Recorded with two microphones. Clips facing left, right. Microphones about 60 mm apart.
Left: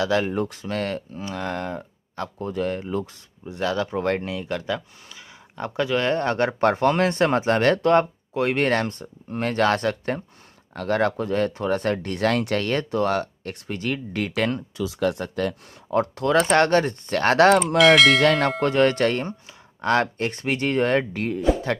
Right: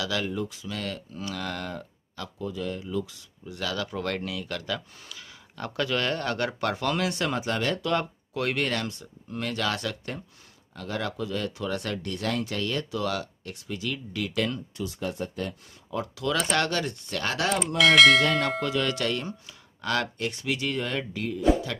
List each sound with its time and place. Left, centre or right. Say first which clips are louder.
0.0 s speech: left 7 dB; left
0.4 s speech: left 7 dB; left
1.2 s speech: left 3 dB; left
2.1 s speech: left 6 dB; left
3.4 s speech: left 7 dB; left
8.0 s speech: left 6 dB; left
8.6 s speech: left 8 dB; left
10.7 s speech: left 10 dB; left
15.0 s speech: left 9 dB; left
15.9 s speech: left 8 dB; left
17.9 s speech: left 1 dB; centre
18.2 s a sound: left 6 dB; left
18.6 s speech: left 8 dB; left